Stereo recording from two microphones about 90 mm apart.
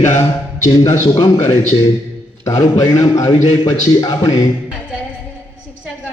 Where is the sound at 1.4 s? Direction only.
30° left (ahead or behind).